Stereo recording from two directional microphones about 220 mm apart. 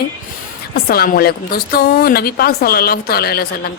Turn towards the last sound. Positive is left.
turn(degrees=45)  # may be behind; listen again after turning